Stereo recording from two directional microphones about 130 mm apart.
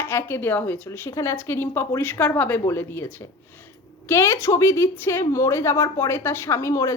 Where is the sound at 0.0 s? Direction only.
15° left (ahead or behind).